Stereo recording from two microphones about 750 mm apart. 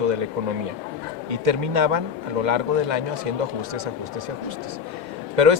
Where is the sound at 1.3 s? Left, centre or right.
Right.